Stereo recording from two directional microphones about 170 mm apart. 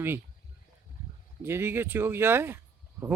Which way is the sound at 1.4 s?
15° right (ahead or behind).